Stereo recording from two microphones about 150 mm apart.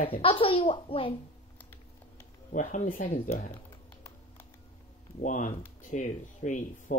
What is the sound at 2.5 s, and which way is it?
Speech, 60° left (ahead or behind).